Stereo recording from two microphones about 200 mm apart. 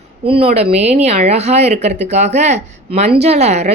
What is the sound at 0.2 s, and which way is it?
A woman's voice, 30° right (ahead or behind).